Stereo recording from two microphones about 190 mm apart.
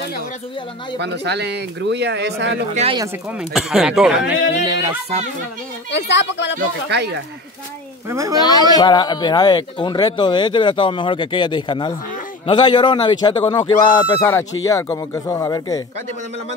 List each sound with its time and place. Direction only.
0.9 s speech: 65° right (ahead or behind)
2.7 s speech: 35° right (ahead or behind)
3.3 s speech: 5° right (ahead or behind)
5.9 s a woman's voice: 65° left (ahead or behind)
6.9 s speech: 65° right (ahead or behind)
8.1 s speech: 15° right (ahead or behind)
8.4 s speech: 20° left (ahead or behind)
14.2 s speech: 10° left (ahead or behind)